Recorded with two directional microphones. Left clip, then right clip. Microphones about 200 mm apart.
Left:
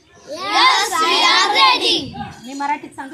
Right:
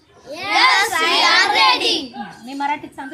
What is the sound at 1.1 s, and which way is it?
Child singing, 5° left (ahead or behind).